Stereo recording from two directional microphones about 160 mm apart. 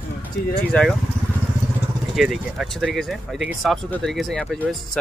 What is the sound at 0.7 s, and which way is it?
Speech, 5° left (ahead or behind).